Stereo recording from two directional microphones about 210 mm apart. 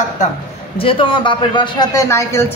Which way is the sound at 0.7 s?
25° left (ahead or behind).